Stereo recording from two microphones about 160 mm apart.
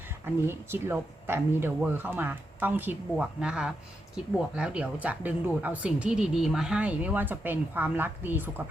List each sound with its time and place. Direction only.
0.4 s speech: 15° right (ahead or behind)